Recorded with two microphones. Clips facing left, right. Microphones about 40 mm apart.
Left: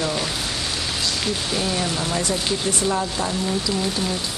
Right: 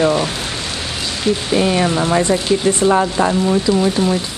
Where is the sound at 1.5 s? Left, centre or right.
Right.